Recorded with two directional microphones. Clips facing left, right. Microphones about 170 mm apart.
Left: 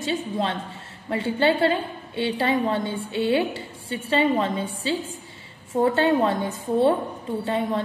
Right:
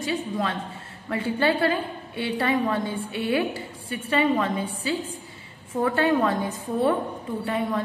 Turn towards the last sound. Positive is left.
turn(degrees=25)  # may be behind; listen again after turning